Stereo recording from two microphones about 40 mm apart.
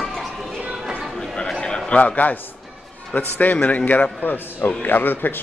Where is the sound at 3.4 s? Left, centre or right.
Left.